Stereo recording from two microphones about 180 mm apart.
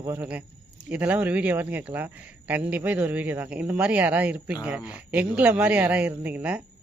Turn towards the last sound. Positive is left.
turn(degrees=-10)  # may be behind; listen again after turning